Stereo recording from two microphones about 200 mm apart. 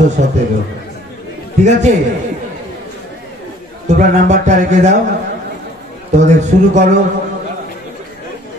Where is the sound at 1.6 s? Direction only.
35° right (ahead or behind).